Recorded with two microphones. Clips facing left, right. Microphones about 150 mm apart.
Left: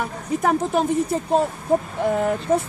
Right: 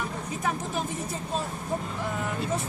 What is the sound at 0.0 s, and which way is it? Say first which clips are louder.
Speech: left 8 dB; 60° left (ahead or behind).